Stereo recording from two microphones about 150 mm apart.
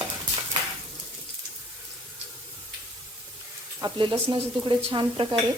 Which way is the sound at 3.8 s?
30° right (ahead or behind).